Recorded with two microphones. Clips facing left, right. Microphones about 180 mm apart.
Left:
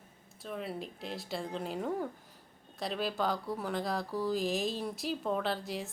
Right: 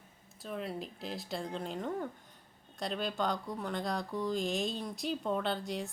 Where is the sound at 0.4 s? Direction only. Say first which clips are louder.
Even; centre (ahead or behind).